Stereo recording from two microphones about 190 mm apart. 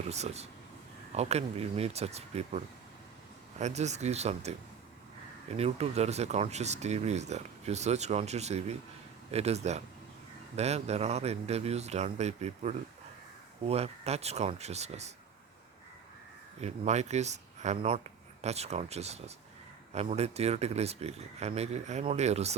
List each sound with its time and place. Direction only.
0.1 s speech: 35° right (ahead or behind)
5.5 s speech: 35° right (ahead or behind)
16.6 s speech: 35° right (ahead or behind)